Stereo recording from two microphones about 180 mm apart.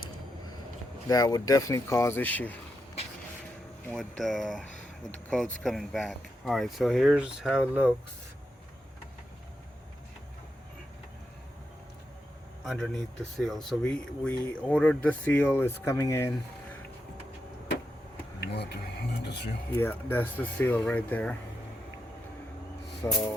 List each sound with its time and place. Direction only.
1.0 s speech: 20° left (ahead or behind)
4.2 s speech: centre (ahead or behind)
12.6 s speech: centre (ahead or behind)
18.5 s a sound: 65° left (ahead or behind)
19.8 s speech: 10° left (ahead or behind)
23.0 s speech: 15° left (ahead or behind)